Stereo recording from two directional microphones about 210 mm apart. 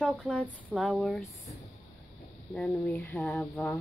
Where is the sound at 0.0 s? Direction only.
Centre (ahead or behind).